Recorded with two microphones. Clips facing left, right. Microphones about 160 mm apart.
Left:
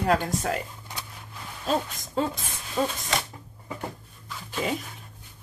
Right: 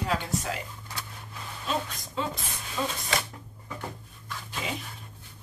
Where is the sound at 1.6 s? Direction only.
45° left (ahead or behind).